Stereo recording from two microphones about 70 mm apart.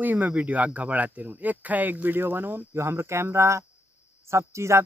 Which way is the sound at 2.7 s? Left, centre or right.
Right.